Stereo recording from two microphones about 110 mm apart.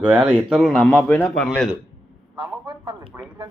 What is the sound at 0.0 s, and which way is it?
Speech, 15° right (ahead or behind).